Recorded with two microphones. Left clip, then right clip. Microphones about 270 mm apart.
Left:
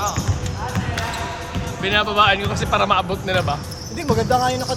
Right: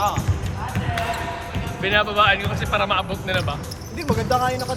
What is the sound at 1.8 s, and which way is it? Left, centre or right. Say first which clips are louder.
Speech: left 1 dB; centre.